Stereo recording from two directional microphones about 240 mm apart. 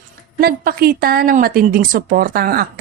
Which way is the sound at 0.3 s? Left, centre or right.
Right.